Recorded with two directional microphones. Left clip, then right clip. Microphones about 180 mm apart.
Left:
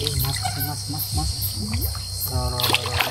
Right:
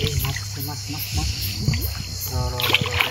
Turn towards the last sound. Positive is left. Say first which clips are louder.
# right 1 dB
turn(degrees=40)  # may be behind; listen again after turning